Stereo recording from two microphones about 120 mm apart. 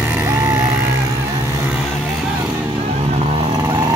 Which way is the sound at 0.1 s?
20° right (ahead or behind).